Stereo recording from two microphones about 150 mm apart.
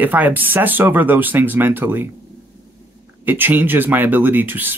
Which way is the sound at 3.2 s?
10° right (ahead or behind).